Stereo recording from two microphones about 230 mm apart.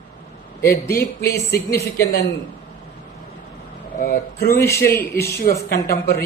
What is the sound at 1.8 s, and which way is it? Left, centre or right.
Speech, left.